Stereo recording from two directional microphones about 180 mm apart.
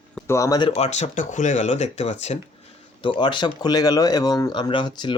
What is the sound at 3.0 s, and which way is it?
Speech, 25° left (ahead or behind).